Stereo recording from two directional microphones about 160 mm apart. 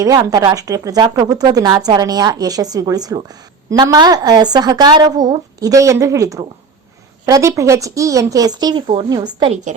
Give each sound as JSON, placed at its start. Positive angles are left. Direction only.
{"t": 0.0, "sound": "speech", "side_deg": -20}
{"t": 9.5, "sound": "a woman's voice", "side_deg": -50}